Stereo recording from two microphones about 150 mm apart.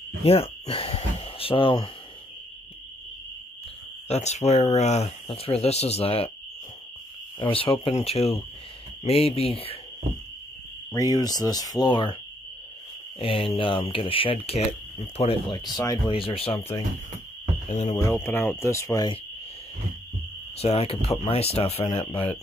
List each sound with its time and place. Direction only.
0.2 s cricket: 40° left (ahead or behind)
4.1 s speech: 50° left (ahead or behind)
7.3 s speech: 35° left (ahead or behind)
10.9 s speech: 25° left (ahead or behind)
13.2 s speech: 35° left (ahead or behind)
15.5 s speech: 25° left (ahead or behind)
16.2 s speech: 40° left (ahead or behind)
17.6 s speech: 50° left (ahead or behind)
17.9 s speech: 15° left (ahead or behind)
20.5 s speech: 45° left (ahead or behind)